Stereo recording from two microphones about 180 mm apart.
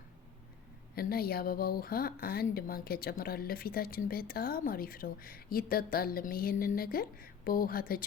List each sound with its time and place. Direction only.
0.9 s speech: 55° left (ahead or behind)